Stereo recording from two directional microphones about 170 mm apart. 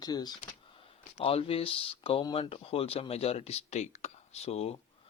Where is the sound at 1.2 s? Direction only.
35° left (ahead or behind).